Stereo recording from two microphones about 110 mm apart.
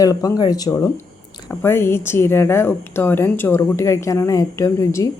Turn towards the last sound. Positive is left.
turn(degrees=25)  # may be behind; listen again after turning